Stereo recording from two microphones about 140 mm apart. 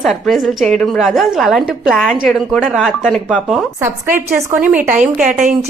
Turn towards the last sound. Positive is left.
turn(degrees=-60)  # may be behind; listen again after turning